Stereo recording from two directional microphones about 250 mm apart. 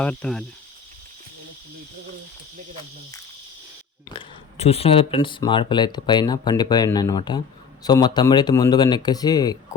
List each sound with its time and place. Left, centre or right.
0.0 s speech: centre
4.1 s speech: left